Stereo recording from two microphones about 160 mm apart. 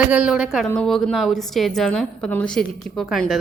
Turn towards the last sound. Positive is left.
turn(degrees=0)  # may be behind; listen again after turning